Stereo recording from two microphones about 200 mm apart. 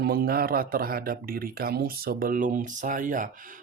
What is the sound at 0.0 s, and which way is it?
Speech, 50° right (ahead or behind).